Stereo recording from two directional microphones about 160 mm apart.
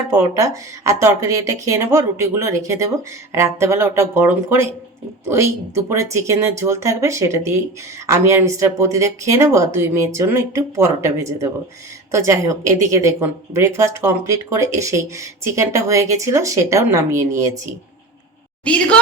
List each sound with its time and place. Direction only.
0.1 s a woman's voice: 20° right (ahead or behind)
18.6 s a woman's voice: 10° left (ahead or behind)